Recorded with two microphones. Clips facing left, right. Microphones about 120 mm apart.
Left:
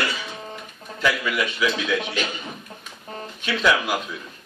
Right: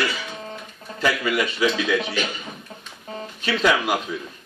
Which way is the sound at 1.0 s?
35° right (ahead or behind).